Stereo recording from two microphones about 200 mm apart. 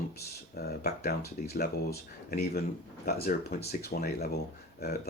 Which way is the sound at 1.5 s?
50° left (ahead or behind).